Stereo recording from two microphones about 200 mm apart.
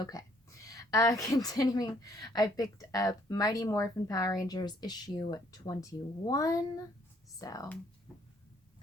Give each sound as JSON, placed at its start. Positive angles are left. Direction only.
{"t": 0.0, "sound": "a woman's voice", "side_deg": 20}